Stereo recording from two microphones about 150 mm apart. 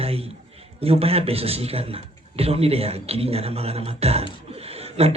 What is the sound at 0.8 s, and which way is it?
Speech, 40° right (ahead or behind).